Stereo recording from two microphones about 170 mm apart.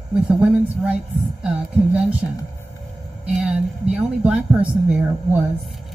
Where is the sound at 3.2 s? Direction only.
5° right (ahead or behind).